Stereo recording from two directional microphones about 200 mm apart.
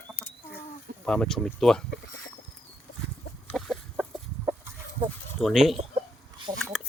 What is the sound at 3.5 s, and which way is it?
Chicken, centre (ahead or behind).